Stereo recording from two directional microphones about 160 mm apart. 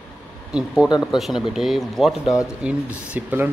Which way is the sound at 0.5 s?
5° right (ahead or behind).